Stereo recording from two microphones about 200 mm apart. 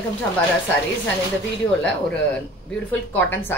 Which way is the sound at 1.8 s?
5° left (ahead or behind).